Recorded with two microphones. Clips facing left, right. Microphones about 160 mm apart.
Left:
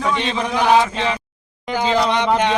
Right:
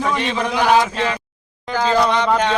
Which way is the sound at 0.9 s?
20° left (ahead or behind).